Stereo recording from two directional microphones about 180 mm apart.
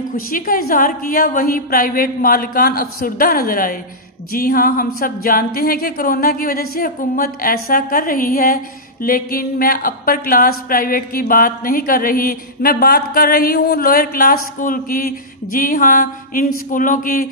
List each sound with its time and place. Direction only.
0.1 s speech: 50° left (ahead or behind)